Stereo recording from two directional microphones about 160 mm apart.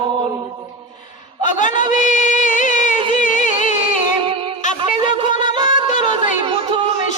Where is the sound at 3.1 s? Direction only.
50° left (ahead or behind).